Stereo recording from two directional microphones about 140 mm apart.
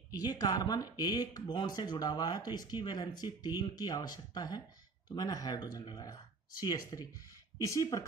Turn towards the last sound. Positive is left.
turn(degrees=20)  # may be behind; listen again after turning